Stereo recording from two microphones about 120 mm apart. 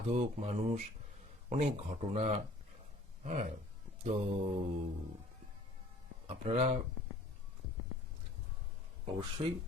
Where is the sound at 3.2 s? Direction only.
75° right (ahead or behind).